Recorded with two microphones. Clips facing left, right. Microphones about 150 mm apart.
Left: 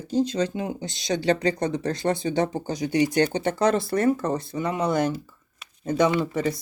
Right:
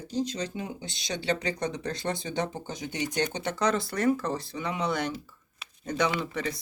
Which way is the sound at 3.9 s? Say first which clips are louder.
Left 4 dB; 30° left (ahead or behind).